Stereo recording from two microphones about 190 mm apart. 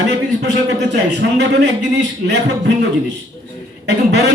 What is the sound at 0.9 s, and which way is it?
Speech, 65° right (ahead or behind).